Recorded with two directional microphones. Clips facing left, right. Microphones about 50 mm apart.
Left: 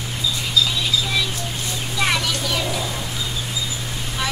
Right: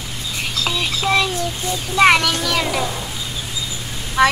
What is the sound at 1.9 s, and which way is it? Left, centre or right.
Speech, right.